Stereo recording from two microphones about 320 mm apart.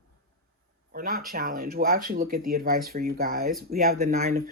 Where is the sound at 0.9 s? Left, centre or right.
Right.